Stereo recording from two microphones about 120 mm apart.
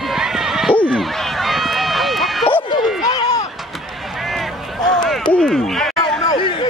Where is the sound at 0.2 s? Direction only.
5° right (ahead or behind).